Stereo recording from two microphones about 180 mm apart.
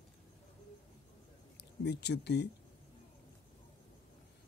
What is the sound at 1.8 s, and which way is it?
Speech, 70° left (ahead or behind).